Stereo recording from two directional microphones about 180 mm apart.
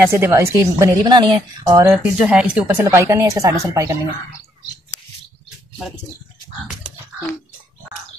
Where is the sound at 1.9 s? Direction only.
10° right (ahead or behind).